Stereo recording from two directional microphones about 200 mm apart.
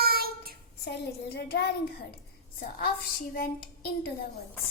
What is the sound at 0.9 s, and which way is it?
A child's voice, 55° left (ahead or behind).